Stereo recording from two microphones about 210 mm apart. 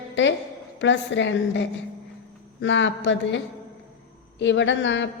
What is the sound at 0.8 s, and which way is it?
A woman's voice, 60° left (ahead or behind).